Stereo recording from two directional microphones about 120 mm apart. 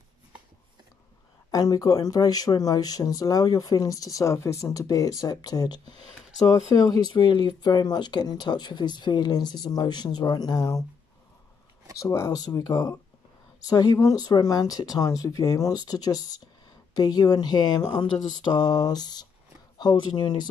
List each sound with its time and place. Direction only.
1.5 s speech: 30° left (ahead or behind)
12.0 s speech: 25° left (ahead or behind)